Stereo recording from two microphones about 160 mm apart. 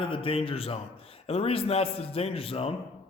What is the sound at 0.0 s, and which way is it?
A man's voice, 35° left (ahead or behind).